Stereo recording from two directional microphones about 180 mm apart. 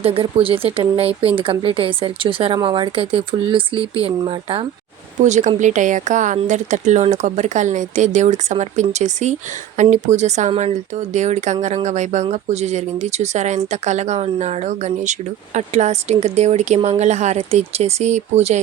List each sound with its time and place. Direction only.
0.0 s speech: 30° right (ahead or behind)
5.2 s speech: 40° right (ahead or behind)